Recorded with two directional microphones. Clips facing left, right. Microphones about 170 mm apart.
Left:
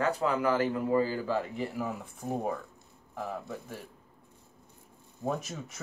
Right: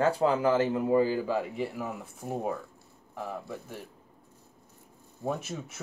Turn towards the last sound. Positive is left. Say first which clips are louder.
# right 1 dB
turn(degrees=-5)  # may be behind; listen again after turning